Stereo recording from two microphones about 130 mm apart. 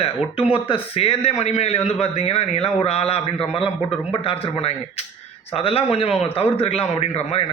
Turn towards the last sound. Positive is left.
turn(degrees=55)  # may be behind; listen again after turning